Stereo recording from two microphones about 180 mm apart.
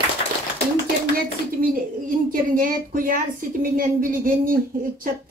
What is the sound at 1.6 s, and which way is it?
A woman's voice, 50° right (ahead or behind).